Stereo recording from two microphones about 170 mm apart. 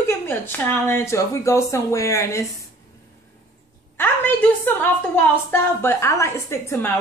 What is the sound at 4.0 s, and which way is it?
Speech, 10° left (ahead or behind).